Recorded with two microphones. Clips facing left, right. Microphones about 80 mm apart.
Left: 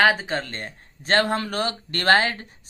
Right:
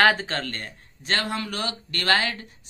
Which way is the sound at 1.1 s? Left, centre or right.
Left.